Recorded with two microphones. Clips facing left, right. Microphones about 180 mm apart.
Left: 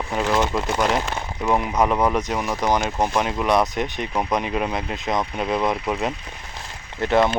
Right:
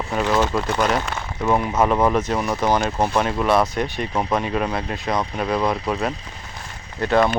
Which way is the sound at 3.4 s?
20° left (ahead or behind).